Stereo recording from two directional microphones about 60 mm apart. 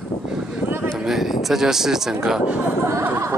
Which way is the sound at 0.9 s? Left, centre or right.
Centre.